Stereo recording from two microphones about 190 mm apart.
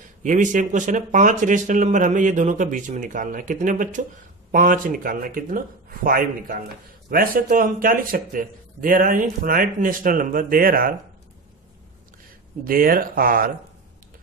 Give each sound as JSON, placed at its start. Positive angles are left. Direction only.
{"t": 0.2, "sound": "a man's voice", "side_deg": -40}
{"t": 12.6, "sound": "a man's voice", "side_deg": -50}